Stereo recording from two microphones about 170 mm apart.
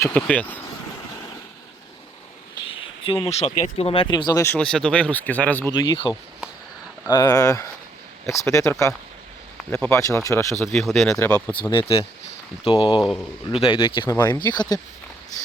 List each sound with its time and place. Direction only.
0.0 s speech: 5° left (ahead or behind)
2.6 s speech: 30° left (ahead or behind)
4.5 s speech: 5° left (ahead or behind)
5.7 s speech: 25° left (ahead or behind)
10.7 s speech: centre (ahead or behind)
11.7 s speech: 30° left (ahead or behind)
13.0 s speech: centre (ahead or behind)
13.6 s speech: 30° left (ahead or behind)